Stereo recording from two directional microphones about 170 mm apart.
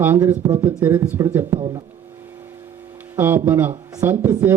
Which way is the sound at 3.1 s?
15° right (ahead or behind).